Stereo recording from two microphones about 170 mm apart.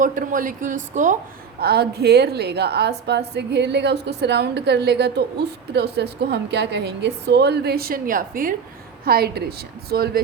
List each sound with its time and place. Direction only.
0.0 s a woman's voice: 50° right (ahead or behind)
9.0 s a woman's voice: 65° right (ahead or behind)